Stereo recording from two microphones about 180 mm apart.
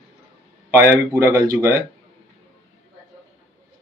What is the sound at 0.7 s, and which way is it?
Speech, 10° right (ahead or behind).